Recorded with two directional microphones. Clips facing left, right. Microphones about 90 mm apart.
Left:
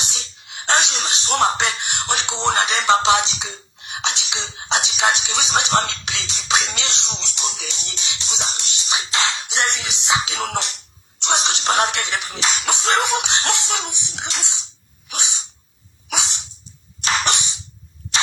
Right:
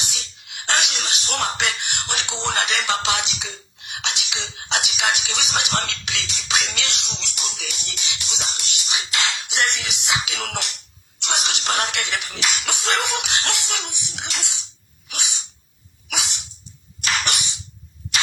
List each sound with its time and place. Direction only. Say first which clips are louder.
0.0 s speech: left 2 dB; 30° left (ahead or behind)
15.1 s sneeze: left 3 dB; 25° left (ahead or behind)
17.0 s cough: left 3 dB; 30° left (ahead or behind)